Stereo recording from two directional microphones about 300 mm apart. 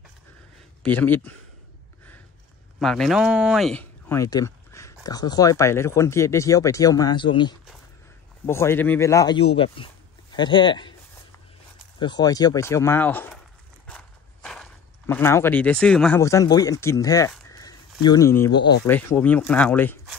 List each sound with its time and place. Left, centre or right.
0.8 s speech: centre
2.8 s speech: centre
12.0 s speech: centre
13.8 s a sound: centre
18.0 s speech: centre